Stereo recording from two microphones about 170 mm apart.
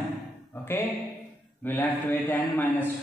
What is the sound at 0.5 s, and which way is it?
A man's voice, 15° left (ahead or behind).